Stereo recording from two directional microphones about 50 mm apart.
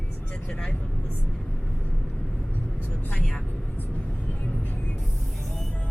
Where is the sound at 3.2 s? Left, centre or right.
Centre.